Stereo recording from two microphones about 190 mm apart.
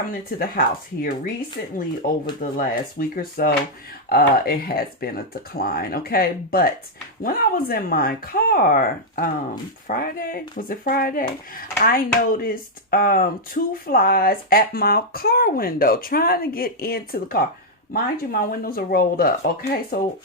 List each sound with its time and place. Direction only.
0.1 s speech: 50° left (ahead or behind)